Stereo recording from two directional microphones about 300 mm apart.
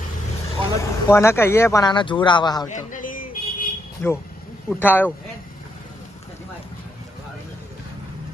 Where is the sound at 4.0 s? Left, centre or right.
Centre.